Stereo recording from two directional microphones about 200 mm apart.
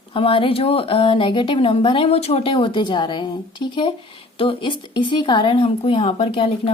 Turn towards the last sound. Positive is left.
turn(degrees=30)  # may be behind; listen again after turning